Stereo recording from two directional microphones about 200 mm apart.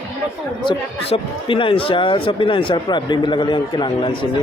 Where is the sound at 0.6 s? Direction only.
25° left (ahead or behind).